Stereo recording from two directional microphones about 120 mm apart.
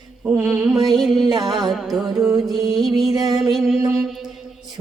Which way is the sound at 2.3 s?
30° right (ahead or behind).